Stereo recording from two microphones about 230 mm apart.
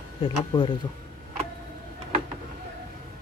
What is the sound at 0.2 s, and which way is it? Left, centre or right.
Speech, left.